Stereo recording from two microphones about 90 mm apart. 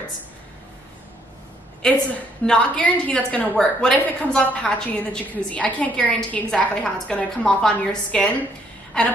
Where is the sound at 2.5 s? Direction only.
15° left (ahead or behind).